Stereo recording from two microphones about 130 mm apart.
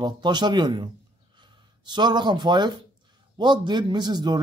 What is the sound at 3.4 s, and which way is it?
Speech, 35° right (ahead or behind).